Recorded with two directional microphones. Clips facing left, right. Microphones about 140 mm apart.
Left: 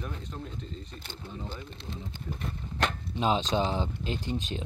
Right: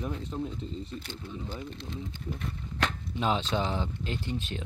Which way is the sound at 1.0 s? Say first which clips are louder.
Right 3 dB; 25° left (ahead or behind).